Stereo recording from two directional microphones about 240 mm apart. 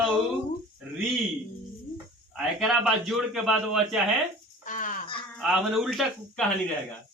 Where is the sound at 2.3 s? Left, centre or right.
Centre.